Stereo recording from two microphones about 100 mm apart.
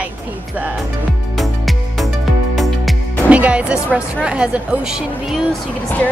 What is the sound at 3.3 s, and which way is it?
A woman's voice, 15° right (ahead or behind).